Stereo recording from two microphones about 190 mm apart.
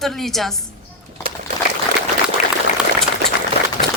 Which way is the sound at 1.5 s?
45° right (ahead or behind).